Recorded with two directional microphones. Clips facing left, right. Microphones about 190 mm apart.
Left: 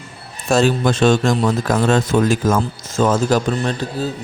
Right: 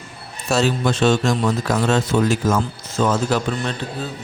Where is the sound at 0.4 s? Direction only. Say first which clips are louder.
Left 4 dB; 50° left (ahead or behind).